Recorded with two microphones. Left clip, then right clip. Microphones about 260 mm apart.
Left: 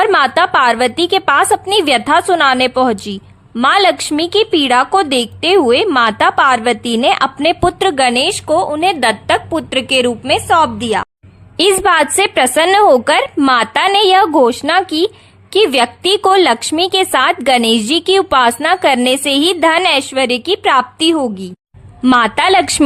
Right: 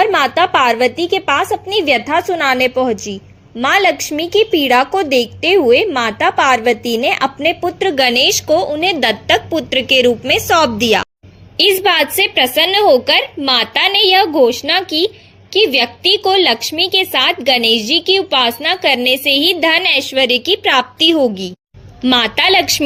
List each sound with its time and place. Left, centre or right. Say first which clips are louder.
0.1 s a woman's voice: left 2 dB; left
1.5 s a woman's voice: left 2 dB; left
2.4 s a woman's voice: left 2 dB; left; by 11.1 s centre
11.5 s a woman's voice: left 1 dB; left